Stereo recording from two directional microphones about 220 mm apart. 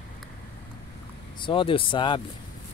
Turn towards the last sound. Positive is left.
turn(degrees=20)  # may be behind; listen again after turning